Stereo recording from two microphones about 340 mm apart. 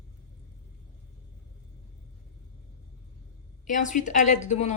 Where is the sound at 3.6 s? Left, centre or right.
Left.